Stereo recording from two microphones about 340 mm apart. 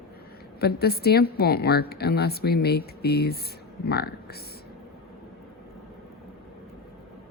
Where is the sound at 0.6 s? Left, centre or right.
Left.